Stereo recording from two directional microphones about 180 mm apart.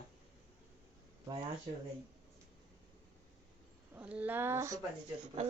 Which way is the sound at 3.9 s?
5° right (ahead or behind).